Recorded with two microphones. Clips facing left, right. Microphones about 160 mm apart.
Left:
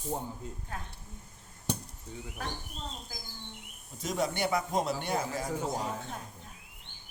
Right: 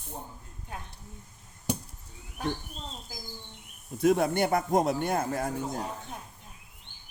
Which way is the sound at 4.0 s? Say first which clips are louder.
Right 7 dB; 60° right (ahead or behind).